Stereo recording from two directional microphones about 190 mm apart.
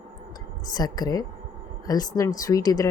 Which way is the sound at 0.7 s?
20° left (ahead or behind).